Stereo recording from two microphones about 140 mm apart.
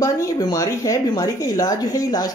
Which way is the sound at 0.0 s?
25° left (ahead or behind).